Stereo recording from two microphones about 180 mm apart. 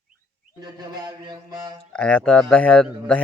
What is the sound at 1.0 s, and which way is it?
Mantra, 25° right (ahead or behind).